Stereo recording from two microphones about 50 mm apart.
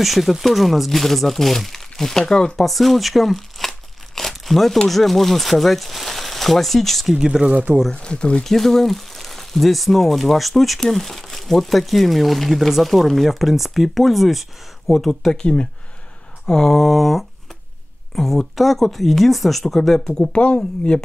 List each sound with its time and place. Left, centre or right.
0.0 s speech: centre
7.2 s speech: centre
7.9 s speech: centre
8.5 s speech: centre
15.3 s speech: centre
20.3 s speech: left